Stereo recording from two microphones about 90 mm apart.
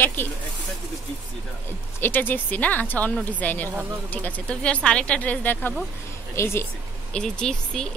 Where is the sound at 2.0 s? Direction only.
20° left (ahead or behind).